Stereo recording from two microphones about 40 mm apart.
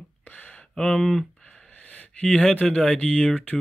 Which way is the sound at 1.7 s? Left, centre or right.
Left.